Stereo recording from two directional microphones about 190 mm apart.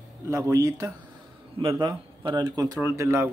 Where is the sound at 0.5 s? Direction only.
15° right (ahead or behind).